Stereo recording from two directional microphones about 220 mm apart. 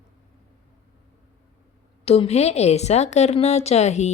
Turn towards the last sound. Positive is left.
turn(degrees=30)  # may be behind; listen again after turning